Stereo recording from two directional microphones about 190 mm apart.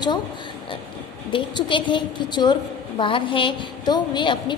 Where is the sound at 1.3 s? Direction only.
25° left (ahead or behind).